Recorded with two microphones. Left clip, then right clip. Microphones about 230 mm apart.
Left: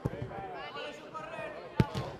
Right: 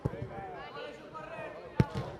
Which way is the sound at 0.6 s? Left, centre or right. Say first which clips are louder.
Left 2 dB; left.